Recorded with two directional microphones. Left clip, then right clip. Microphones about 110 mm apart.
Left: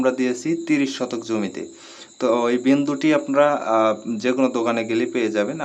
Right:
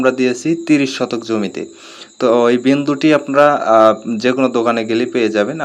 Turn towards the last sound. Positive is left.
turn(degrees=-35)  # may be behind; listen again after turning